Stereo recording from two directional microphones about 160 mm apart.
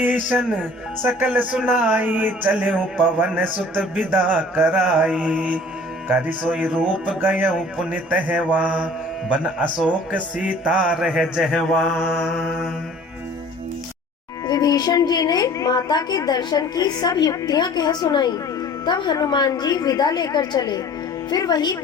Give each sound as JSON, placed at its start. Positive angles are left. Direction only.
{"t": 0.3, "sound": "speech", "side_deg": -10}
{"t": 9.8, "sound": "music", "side_deg": -10}
{"t": 14.4, "sound": "a woman's voice", "side_deg": 25}